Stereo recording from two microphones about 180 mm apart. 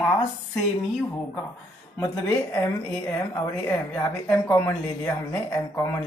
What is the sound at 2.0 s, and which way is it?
Speech, 15° left (ahead or behind).